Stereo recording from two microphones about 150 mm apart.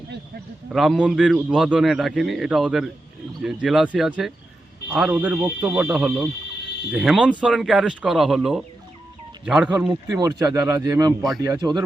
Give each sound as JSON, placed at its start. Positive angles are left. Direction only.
{"t": 0.7, "sound": "a man's voice", "side_deg": 0}
{"t": 9.9, "sound": "speech", "side_deg": -25}